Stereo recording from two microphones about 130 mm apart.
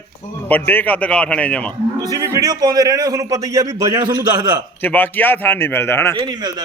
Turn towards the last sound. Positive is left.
turn(degrees=-30)  # may be behind; listen again after turning